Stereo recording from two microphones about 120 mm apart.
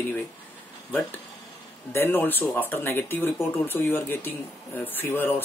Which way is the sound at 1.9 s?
20° left (ahead or behind).